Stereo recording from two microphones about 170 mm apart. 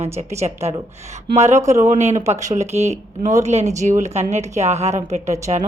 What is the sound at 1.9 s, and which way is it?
Speech, 45° right (ahead or behind).